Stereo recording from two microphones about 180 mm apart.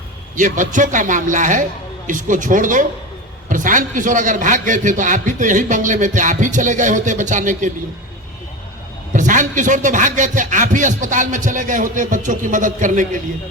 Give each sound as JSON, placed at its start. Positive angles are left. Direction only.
{"t": 0.3, "sound": "a man's voice", "side_deg": -45}
{"t": 9.1, "sound": "a man's voice", "side_deg": -45}